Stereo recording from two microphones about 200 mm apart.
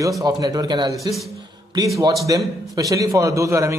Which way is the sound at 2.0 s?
15° right (ahead or behind).